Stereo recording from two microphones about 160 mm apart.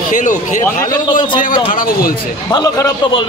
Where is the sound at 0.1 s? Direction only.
50° left (ahead or behind).